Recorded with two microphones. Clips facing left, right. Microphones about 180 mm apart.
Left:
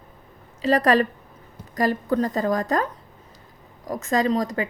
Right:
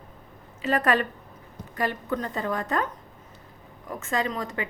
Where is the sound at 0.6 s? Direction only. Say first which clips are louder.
Left 5 dB; 35° left (ahead or behind).